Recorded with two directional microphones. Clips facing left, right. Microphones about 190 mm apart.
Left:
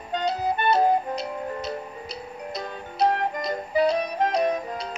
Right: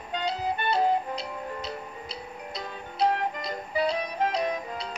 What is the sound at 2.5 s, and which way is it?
Music, 45° left (ahead or behind).